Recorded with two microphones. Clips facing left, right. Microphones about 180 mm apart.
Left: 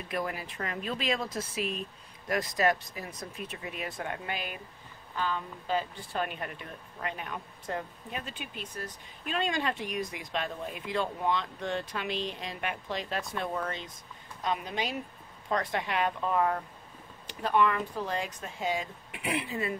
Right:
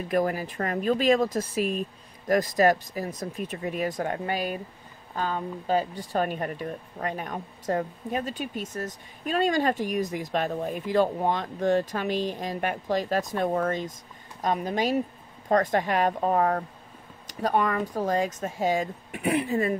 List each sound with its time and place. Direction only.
0.1 s speech: 40° right (ahead or behind)